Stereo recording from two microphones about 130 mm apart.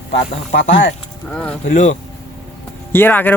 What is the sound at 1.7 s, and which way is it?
Speech, 75° left (ahead or behind).